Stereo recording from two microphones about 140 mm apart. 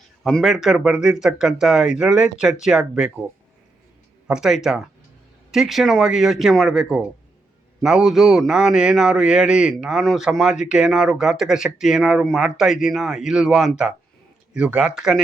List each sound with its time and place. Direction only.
0.2 s a man's voice: 5° left (ahead or behind)
4.3 s a man's voice: 5° right (ahead or behind)